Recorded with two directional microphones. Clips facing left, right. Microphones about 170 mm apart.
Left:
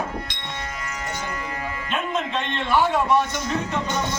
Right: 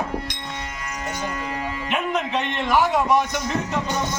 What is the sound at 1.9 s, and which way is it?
A man's voice, 10° right (ahead or behind).